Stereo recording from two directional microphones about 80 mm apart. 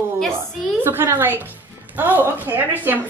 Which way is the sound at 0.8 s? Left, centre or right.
Right.